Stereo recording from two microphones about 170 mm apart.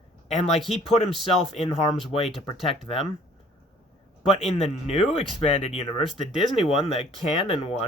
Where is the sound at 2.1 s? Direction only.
35° left (ahead or behind).